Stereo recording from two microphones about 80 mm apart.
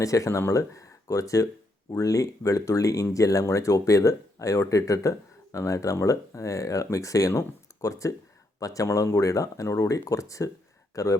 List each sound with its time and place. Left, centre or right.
0.0 s speech: left